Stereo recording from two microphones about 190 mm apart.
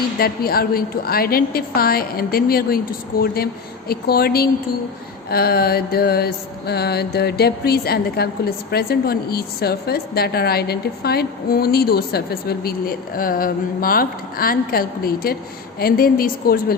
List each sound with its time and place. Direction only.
0.2 s a woman's voice: 50° left (ahead or behind)
5.3 s mantra: 55° left (ahead or behind)
15.8 s a woman's voice: 50° left (ahead or behind)